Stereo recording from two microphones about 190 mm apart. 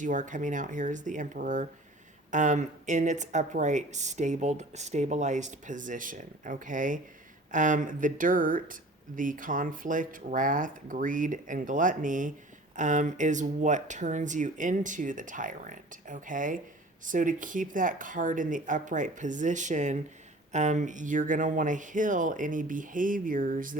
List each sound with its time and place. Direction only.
0.0 s speech: 40° right (ahead or behind)